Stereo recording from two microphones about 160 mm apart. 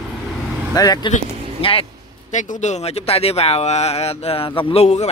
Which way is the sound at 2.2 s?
50° left (ahead or behind).